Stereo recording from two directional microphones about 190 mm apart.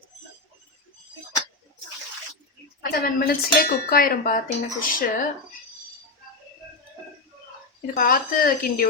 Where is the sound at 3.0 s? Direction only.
50° left (ahead or behind).